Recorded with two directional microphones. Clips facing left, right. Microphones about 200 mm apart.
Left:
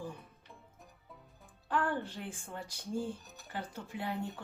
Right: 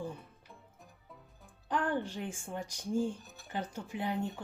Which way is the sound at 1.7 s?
15° right (ahead or behind).